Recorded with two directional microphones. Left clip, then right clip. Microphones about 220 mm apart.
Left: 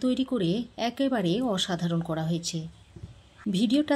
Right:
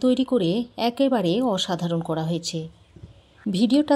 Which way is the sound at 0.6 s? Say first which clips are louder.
Right 6 dB; 10° left (ahead or behind).